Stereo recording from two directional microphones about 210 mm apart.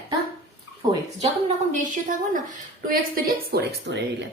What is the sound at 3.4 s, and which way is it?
Speech, 50° right (ahead or behind).